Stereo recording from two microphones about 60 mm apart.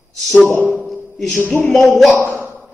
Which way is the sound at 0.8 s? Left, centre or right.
Centre.